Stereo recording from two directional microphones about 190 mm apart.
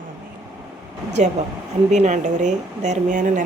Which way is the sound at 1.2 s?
35° right (ahead or behind).